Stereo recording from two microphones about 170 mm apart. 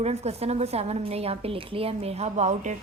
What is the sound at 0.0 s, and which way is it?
A woman's voice, 40° right (ahead or behind).